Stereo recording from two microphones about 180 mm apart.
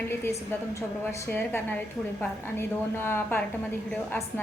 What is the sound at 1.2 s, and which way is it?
A woman's voice, 10° left (ahead or behind).